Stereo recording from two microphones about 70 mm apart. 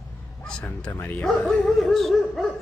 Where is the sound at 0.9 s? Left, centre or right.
Left.